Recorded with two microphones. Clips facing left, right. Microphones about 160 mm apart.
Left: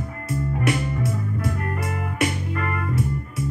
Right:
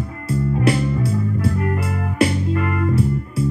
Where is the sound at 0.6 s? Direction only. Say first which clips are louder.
Right 4 dB; 30° right (ahead or behind).